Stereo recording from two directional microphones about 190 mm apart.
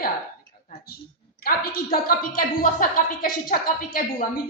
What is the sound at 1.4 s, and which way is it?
Speech, 50° left (ahead or behind).